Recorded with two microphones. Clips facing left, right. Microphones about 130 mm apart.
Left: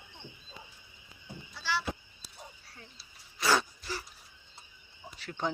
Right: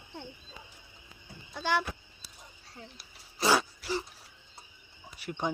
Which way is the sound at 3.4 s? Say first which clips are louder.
Right 2 dB; 30° right (ahead or behind).